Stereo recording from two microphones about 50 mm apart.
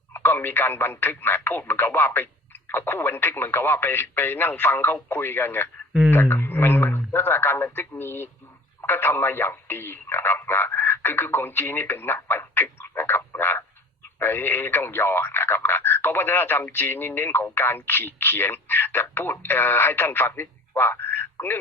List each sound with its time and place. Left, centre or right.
0.1 s a man's voice: left